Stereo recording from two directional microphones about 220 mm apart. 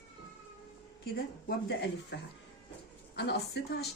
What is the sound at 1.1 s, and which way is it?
Speech, 45° left (ahead or behind).